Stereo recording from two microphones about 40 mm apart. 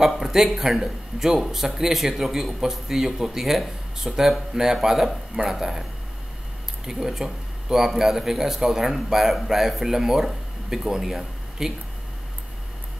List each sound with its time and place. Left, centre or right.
0.2 s a man's voice: centre
6.9 s a man's voice: centre